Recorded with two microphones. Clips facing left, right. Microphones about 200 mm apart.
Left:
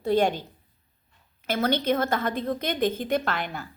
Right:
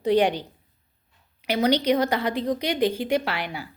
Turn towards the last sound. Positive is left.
turn(degrees=-10)  # may be behind; listen again after turning